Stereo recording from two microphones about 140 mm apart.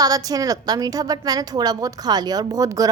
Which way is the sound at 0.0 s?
25° right (ahead or behind).